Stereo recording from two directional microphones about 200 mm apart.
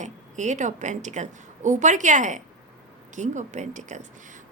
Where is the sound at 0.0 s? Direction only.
35° right (ahead or behind).